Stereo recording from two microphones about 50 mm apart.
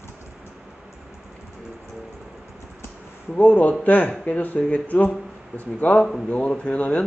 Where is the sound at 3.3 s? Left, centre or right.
Left.